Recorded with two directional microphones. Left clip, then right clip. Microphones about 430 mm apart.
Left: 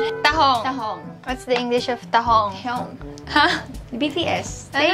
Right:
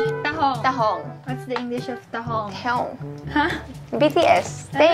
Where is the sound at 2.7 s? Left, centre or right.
Right.